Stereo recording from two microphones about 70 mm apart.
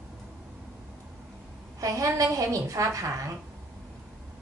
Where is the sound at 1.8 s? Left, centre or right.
Right.